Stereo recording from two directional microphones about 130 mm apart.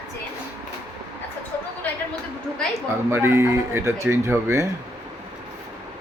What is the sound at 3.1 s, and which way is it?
Speech, 20° right (ahead or behind).